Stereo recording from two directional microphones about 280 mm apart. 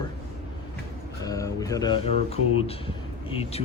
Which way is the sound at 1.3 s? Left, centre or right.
Centre.